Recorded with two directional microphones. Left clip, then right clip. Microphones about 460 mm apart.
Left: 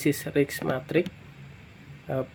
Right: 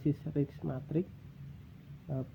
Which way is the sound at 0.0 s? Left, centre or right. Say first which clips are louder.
Left 10 dB; centre.